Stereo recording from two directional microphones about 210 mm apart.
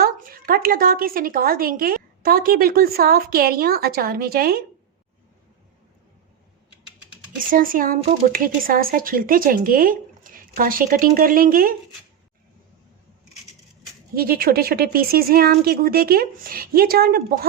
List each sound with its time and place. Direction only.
0.0 s a woman's voice: 45° right (ahead or behind)
7.3 s speech: 40° right (ahead or behind)
14.2 s a woman's voice: 45° right (ahead or behind)